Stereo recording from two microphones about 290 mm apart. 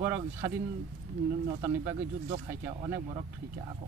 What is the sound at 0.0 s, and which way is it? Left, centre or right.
Speech, centre.